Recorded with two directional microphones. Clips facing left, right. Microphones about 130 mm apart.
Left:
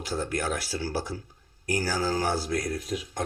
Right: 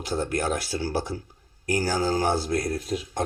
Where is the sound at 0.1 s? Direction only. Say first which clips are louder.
Right 3 dB; 25° right (ahead or behind).